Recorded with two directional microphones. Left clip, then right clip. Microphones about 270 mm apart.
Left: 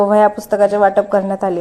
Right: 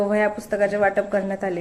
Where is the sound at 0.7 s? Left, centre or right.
Centre.